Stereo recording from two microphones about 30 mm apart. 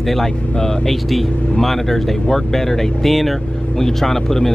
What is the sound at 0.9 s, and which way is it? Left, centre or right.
Speech, centre.